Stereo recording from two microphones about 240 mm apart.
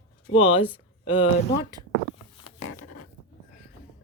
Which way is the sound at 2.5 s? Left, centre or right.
Left.